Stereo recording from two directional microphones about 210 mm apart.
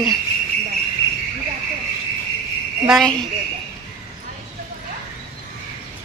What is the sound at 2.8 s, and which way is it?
Speech, centre (ahead or behind).